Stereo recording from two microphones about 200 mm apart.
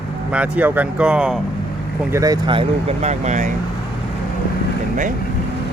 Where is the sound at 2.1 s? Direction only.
20° right (ahead or behind); by 3.5 s 35° right (ahead or behind).